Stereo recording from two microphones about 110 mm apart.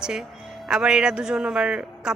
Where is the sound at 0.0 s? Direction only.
5° right (ahead or behind).